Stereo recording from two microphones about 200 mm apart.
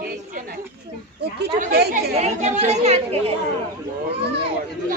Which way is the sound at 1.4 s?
55° right (ahead or behind).